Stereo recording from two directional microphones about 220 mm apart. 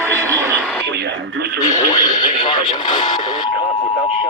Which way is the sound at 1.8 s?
15° left (ahead or behind).